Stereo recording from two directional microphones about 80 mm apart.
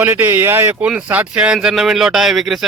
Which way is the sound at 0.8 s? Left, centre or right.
Centre.